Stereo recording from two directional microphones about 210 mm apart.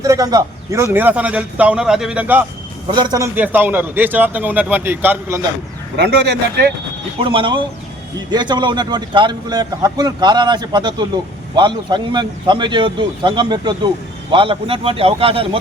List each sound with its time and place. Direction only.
0.0 s a man's voice: 15° right (ahead or behind)
2.8 s a man's voice: 20° right (ahead or behind)
6.0 s speech: 50° right (ahead or behind)
7.2 s a man's voice: 25° right (ahead or behind)